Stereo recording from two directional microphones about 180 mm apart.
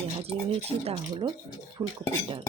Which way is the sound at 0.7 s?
35° right (ahead or behind).